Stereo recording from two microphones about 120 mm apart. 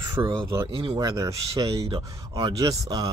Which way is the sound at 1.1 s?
25° right (ahead or behind).